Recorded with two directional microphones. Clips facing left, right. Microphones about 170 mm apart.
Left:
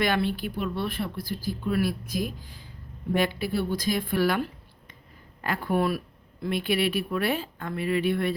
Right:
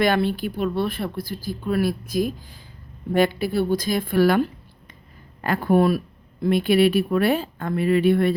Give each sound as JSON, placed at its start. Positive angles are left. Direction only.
{"t": 0.0, "sound": "speech", "side_deg": -40}